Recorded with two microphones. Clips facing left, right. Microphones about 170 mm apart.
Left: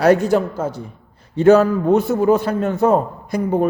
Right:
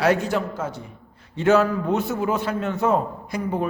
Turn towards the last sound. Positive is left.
turn(degrees=40)  # may be behind; listen again after turning